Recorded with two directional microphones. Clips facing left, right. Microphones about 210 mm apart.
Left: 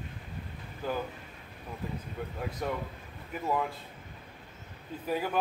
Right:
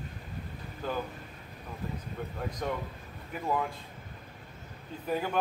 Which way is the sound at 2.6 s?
5° left (ahead or behind).